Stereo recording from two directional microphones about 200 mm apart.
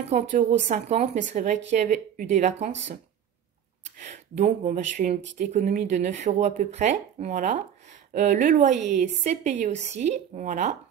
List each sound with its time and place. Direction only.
0.1 s speech: 40° right (ahead or behind)
3.8 s speech: 35° right (ahead or behind)